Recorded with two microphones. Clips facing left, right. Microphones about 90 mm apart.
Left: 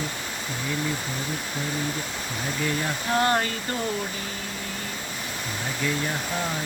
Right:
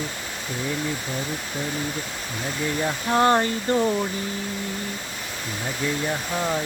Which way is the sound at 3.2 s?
25° right (ahead or behind).